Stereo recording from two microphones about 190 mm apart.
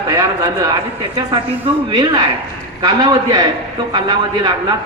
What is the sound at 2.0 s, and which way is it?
A man's voice, 25° right (ahead or behind).